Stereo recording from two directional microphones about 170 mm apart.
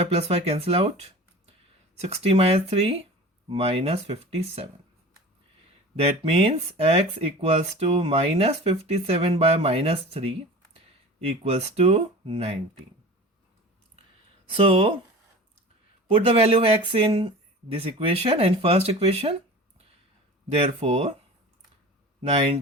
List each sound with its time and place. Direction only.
0.0 s speech: 35° right (ahead or behind)
2.0 s speech: 40° right (ahead or behind)
6.0 s speech: 35° right (ahead or behind)
14.5 s speech: 35° right (ahead or behind)
16.0 s speech: 35° right (ahead or behind)
20.6 s speech: 40° right (ahead or behind)